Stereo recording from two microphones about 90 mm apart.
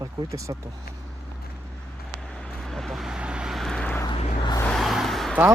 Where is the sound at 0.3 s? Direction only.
35° right (ahead or behind).